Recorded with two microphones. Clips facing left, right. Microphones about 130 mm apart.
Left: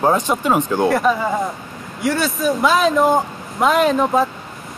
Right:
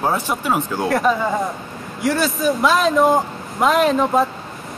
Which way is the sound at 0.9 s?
Centre (ahead or behind).